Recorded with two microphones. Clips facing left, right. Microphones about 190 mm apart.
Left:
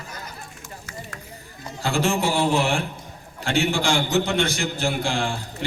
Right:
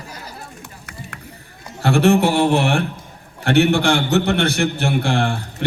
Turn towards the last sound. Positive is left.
turn(degrees=-60)  # may be behind; listen again after turning